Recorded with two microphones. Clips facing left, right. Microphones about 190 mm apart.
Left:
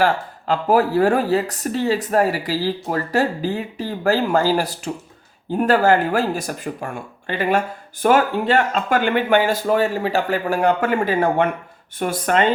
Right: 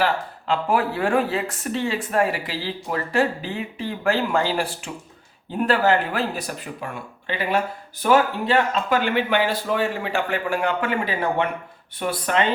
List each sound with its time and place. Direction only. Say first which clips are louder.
0.0 s speech: left 4 dB; 40° left (ahead or behind)